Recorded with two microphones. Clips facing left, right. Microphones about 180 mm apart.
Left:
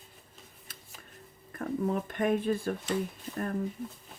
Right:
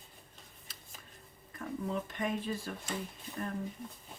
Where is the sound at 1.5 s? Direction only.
55° left (ahead or behind).